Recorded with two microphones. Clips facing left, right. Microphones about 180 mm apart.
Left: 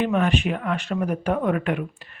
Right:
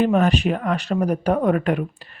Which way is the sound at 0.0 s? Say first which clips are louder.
Right 4 dB; 40° right (ahead or behind).